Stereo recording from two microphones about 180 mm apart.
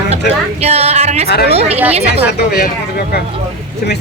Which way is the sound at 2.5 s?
55° left (ahead or behind).